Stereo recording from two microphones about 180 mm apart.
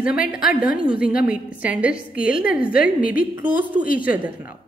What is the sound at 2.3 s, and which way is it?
A woman's voice, 50° left (ahead or behind).